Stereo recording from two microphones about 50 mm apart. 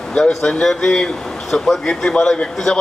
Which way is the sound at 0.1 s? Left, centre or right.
Centre.